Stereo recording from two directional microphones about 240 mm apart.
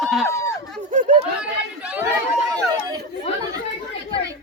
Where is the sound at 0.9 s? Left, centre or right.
Right.